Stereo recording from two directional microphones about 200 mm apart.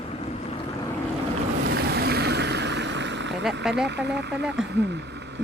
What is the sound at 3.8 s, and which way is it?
Speech, 60° right (ahead or behind).